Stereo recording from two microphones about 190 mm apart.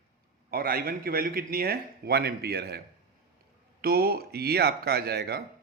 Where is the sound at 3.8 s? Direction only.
55° right (ahead or behind).